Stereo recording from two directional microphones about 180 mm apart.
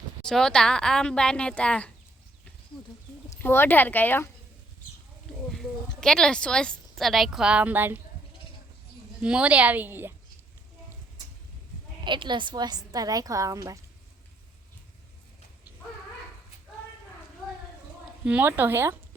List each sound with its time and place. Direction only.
0.3 s speech: 5° left (ahead or behind)
3.2 s speech: 10° left (ahead or behind)
5.5 s speech: centre (ahead or behind)
9.2 s a woman's voice: 5° right (ahead or behind)
12.0 s a woman's voice: 25° right (ahead or behind)
18.3 s a woman's voice: 10° right (ahead or behind)